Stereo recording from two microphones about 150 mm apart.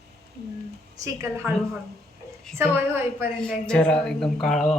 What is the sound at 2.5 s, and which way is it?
Speech, 15° right (ahead or behind).